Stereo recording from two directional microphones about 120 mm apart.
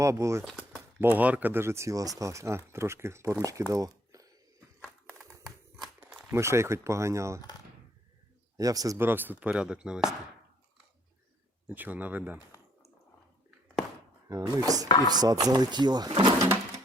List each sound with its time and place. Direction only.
0.0 s speech: 25° right (ahead or behind)
3.7 s a sound: 30° right (ahead or behind)
4.8 s a sound: centre (ahead or behind)
6.2 s speech: 20° right (ahead or behind)
8.5 s speech: 30° right (ahead or behind)
9.0 s speech: 15° right (ahead or behind)
11.7 s speech: 15° right (ahead or behind)
14.3 s speech: 35° right (ahead or behind)